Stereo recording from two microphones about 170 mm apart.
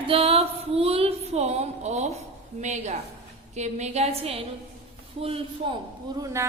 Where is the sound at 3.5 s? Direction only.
40° right (ahead or behind).